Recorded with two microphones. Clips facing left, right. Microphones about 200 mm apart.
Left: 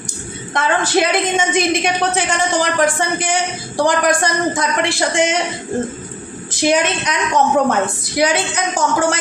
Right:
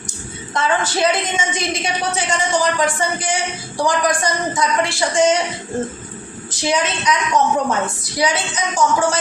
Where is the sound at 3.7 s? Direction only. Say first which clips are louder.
Left 3 dB; 60° left (ahead or behind).